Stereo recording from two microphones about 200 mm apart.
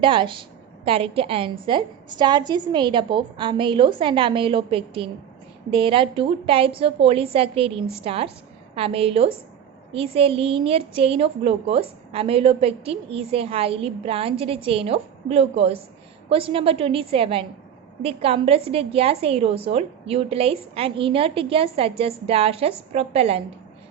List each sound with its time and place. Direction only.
0.0 s a woman's voice: 25° right (ahead or behind)